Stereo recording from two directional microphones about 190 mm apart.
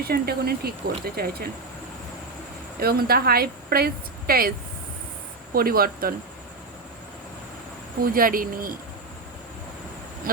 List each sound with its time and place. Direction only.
0.0 s a woman's voice: 55° right (ahead or behind)
2.8 s a woman's voice: 55° right (ahead or behind)
5.5 s a woman's voice: 50° right (ahead or behind)
8.0 s a woman's voice: 50° right (ahead or behind)